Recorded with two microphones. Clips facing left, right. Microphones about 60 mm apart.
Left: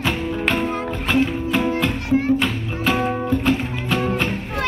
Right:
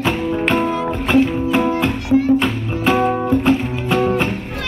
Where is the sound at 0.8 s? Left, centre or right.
Right.